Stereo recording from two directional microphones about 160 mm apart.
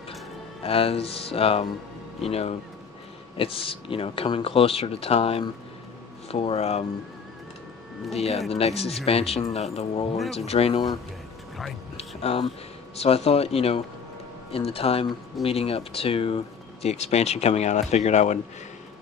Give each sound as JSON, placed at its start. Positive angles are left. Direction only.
{"t": 0.7, "sound": "speech", "side_deg": 35}
{"t": 8.1, "sound": "speech", "side_deg": 40}
{"t": 12.0, "sound": "music", "side_deg": 40}
{"t": 12.9, "sound": "speech", "side_deg": 40}